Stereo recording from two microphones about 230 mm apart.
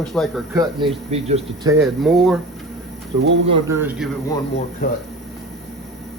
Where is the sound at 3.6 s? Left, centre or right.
Centre.